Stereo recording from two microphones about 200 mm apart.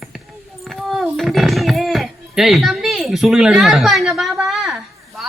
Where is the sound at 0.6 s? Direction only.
Centre (ahead or behind).